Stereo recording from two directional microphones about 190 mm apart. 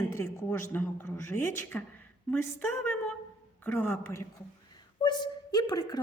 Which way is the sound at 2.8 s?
10° left (ahead or behind).